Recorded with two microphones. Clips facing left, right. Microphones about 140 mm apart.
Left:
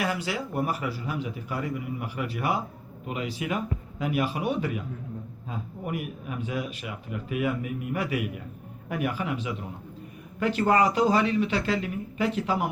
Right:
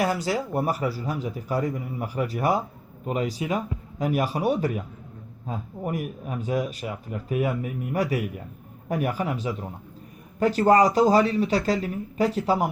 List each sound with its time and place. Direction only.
0.0 s speech: 40° right (ahead or behind)